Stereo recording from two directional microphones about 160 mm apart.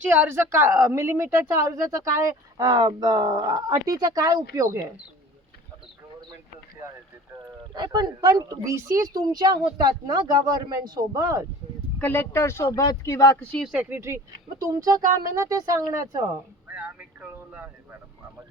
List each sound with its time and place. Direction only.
0.0 s speech: 10° right (ahead or behind)
7.7 s speech: 25° right (ahead or behind)
11.9 s speech: 10° left (ahead or behind)
13.4 s speech: 5° left (ahead or behind)
13.7 s speech: 15° right (ahead or behind)
16.7 s speech: 10° right (ahead or behind)